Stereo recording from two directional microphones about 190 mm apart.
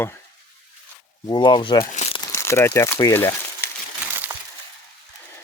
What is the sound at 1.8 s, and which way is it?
Crumpling, 40° left (ahead or behind).